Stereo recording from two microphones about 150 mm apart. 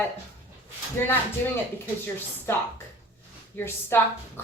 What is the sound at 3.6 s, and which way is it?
Speech, 15° left (ahead or behind).